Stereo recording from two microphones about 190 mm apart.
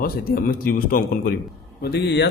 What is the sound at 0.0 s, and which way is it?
A man's voice, 50° left (ahead or behind).